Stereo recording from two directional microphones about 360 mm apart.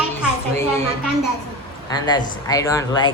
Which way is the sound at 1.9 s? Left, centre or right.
Centre.